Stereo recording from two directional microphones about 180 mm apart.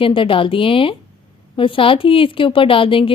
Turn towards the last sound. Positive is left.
turn(degrees=30)  # may be behind; listen again after turning